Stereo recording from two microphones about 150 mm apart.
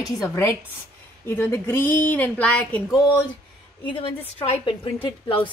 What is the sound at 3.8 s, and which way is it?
A woman's voice, 35° left (ahead or behind).